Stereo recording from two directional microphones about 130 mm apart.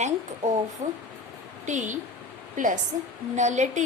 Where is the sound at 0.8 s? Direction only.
65° right (ahead or behind).